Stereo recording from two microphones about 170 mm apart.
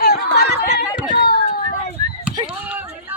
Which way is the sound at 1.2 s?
65° left (ahead or behind).